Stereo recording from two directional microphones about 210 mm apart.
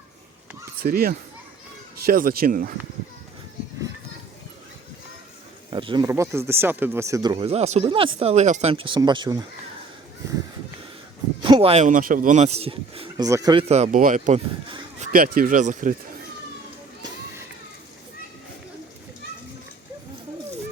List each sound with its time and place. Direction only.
0.8 s speech: 45° right (ahead or behind)
5.7 s speech: 20° right (ahead or behind)
11.4 s speech: 25° right (ahead or behind)
13.2 s speech: 15° right (ahead or behind); by 16.0 s 40° right (ahead or behind)